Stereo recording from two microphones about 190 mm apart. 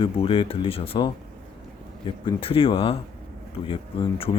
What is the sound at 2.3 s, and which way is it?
Speech, 30° left (ahead or behind).